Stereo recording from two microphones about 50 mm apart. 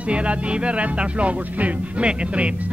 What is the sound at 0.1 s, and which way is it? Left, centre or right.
Music, right.